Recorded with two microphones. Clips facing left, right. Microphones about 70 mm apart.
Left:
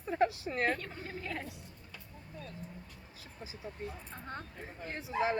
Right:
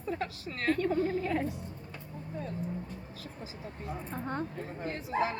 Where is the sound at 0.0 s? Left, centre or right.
Left.